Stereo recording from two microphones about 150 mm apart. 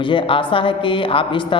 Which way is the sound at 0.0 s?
35° left (ahead or behind).